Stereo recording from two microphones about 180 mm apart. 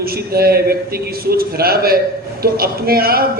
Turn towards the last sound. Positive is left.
turn(degrees=-55)  # may be behind; listen again after turning